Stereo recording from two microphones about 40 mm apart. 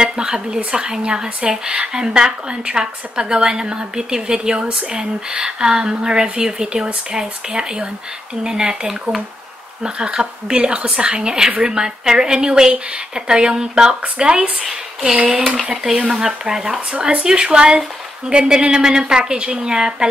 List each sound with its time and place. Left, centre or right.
0.0 s a woman's voice: centre
14.6 s a woman's voice: centre